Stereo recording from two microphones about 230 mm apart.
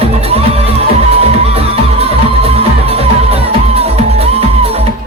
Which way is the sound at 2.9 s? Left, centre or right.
Right.